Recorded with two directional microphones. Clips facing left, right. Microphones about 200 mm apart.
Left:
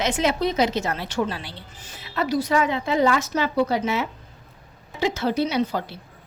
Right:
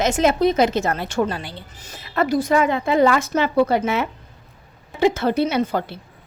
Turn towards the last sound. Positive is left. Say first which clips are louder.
# right 3 dB
turn(degrees=-55)  # may be behind; listen again after turning